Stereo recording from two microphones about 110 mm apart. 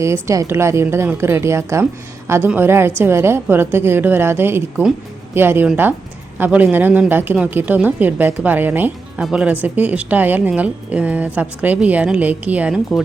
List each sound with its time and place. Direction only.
0.0 s a woman's voice: 25° right (ahead or behind)